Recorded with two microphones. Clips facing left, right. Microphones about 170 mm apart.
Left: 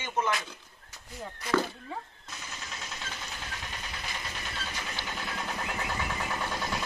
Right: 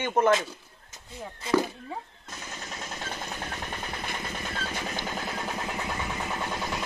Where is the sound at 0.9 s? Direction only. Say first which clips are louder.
Right 1 dB; 25° right (ahead or behind).